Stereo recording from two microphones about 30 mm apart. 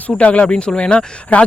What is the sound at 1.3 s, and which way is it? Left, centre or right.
Speech, left.